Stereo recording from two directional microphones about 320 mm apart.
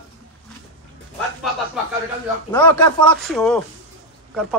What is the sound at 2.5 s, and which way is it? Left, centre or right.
A man's voice, centre.